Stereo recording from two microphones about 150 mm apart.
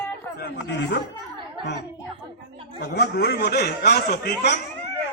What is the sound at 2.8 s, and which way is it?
A man's voice, 90° left.